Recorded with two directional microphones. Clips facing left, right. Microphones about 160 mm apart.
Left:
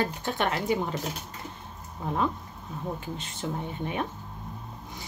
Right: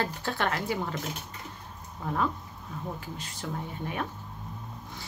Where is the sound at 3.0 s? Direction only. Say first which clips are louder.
Left 4 dB; 25° left (ahead or behind).